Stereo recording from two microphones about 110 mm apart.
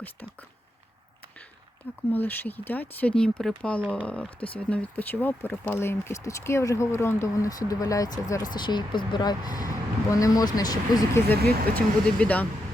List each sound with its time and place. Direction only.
2.1 s speech: 15° left (ahead or behind); by 11.0 s 35° left (ahead or behind)
11.1 s speech: 15° left (ahead or behind)